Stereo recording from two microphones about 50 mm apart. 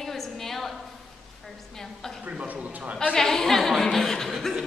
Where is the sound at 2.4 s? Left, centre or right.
Right.